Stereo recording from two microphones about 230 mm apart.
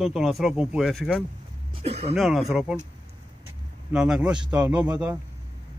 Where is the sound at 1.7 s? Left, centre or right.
Right.